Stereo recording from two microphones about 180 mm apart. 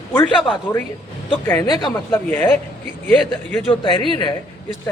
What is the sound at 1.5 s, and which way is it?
Speech, 20° left (ahead or behind).